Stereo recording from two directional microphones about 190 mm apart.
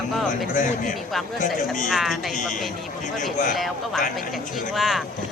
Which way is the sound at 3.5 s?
Centre (ahead or behind).